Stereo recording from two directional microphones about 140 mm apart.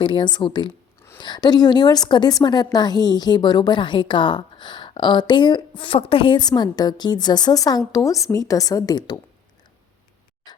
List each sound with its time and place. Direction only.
0.0 s a woman's voice: 35° left (ahead or behind)